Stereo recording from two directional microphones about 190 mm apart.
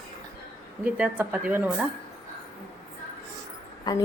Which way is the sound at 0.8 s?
10° right (ahead or behind).